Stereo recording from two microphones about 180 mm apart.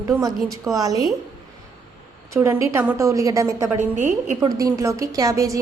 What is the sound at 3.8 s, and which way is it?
Speech, 45° right (ahead or behind).